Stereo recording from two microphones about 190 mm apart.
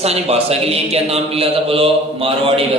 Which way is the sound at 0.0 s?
35° right (ahead or behind).